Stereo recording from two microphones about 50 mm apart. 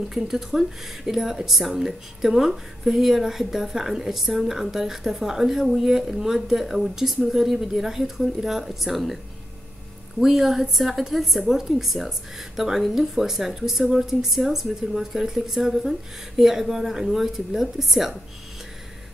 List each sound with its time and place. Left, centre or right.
0.1 s speech: centre